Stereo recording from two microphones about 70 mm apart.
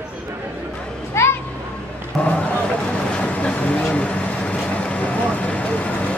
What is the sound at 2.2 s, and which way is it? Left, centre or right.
Vehicle, centre.